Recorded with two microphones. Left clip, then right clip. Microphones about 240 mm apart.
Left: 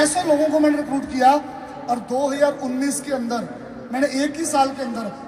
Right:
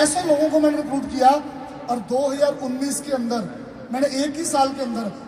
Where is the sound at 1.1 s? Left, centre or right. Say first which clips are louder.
Even; left.